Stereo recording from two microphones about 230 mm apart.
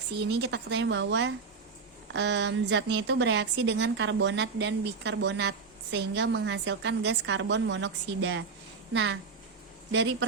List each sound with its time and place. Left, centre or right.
0.3 s speech: right